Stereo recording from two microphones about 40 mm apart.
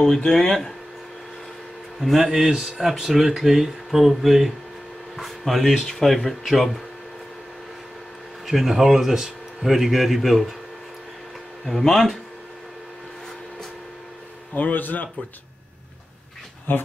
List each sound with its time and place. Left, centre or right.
0.0 s speech: centre
2.0 s speech: centre
8.5 s speech: centre
11.6 s speech: centre
14.5 s speech: left
16.7 s speech: left